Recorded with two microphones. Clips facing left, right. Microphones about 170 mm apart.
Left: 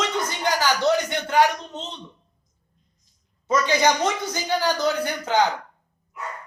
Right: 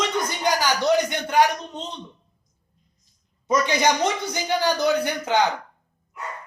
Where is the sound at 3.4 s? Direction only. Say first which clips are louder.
Even; 15° right (ahead or behind).